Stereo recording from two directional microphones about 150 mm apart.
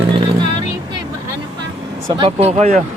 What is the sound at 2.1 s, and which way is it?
Speech, 40° right (ahead or behind).